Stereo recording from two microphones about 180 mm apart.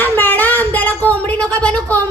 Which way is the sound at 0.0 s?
10° left (ahead or behind).